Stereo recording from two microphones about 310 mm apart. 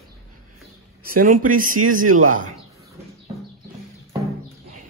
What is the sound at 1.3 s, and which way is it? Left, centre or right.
Speech, right.